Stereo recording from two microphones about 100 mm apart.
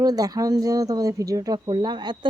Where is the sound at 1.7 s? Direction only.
50° right (ahead or behind).